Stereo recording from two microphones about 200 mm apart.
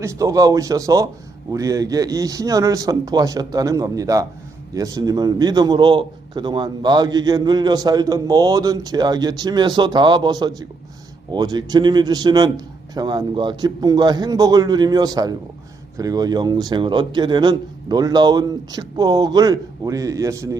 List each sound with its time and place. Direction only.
0.0 s a man's voice: 15° right (ahead or behind)